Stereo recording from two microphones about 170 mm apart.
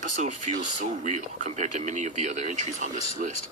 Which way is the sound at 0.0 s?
45° right (ahead or behind).